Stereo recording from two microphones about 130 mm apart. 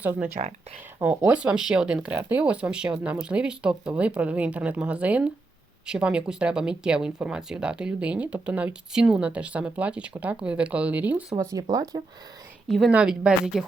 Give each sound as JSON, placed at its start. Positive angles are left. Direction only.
{"t": 0.0, "sound": "speech", "side_deg": -15}
{"t": 11.7, "sound": "speech", "side_deg": -30}
{"t": 12.6, "sound": "a woman's voice", "side_deg": 0}